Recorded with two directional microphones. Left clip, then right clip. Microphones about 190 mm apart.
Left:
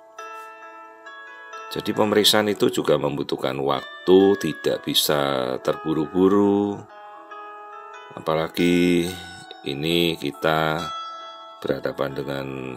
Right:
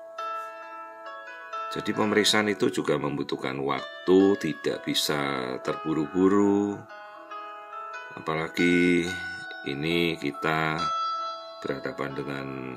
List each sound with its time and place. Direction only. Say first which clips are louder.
1.7 s speech: left 6 dB; 25° left (ahead or behind)
8.3 s speech: left 4 dB; 25° left (ahead or behind)